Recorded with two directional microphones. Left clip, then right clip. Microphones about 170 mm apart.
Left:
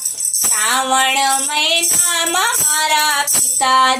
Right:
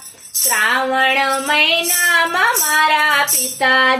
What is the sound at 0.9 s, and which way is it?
Music, 30° left (ahead or behind).